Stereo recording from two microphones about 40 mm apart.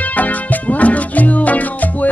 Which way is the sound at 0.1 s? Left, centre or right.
Left.